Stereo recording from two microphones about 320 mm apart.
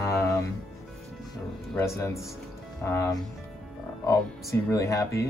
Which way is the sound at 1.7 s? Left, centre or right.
Centre.